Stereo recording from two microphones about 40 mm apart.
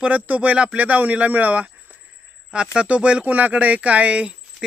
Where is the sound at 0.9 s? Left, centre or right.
Right.